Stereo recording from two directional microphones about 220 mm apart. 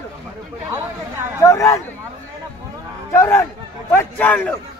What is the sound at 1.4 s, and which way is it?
Speech, 15° left (ahead or behind).